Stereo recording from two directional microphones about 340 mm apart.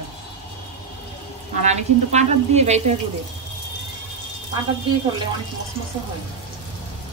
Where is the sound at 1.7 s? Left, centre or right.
Centre.